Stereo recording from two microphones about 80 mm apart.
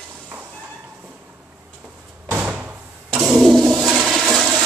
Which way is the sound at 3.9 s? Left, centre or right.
Centre.